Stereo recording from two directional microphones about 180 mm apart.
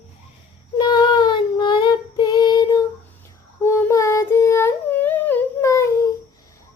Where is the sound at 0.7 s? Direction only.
25° left (ahead or behind).